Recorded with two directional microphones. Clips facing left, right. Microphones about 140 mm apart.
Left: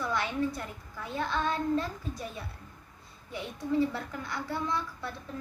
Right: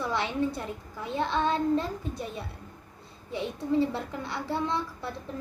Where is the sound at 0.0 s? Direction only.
25° right (ahead or behind).